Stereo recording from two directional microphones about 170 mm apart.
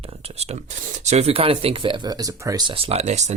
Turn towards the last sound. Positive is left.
turn(degrees=-40)  # may be behind; listen again after turning